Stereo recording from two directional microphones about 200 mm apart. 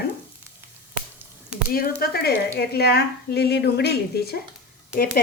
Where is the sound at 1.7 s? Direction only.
50° left (ahead or behind).